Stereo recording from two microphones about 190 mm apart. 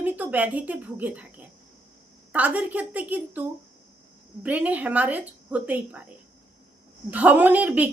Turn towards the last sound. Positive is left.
turn(degrees=-10)  # may be behind; listen again after turning